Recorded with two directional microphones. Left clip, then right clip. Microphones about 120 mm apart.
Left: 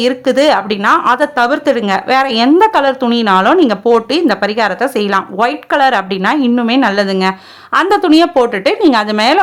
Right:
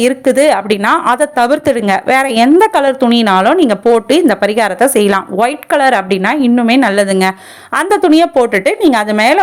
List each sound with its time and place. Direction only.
0.0 s a woman's voice: 25° right (ahead or behind)
1.0 s a woman's voice: 20° right (ahead or behind)
1.4 s a woman's voice: 30° right (ahead or behind)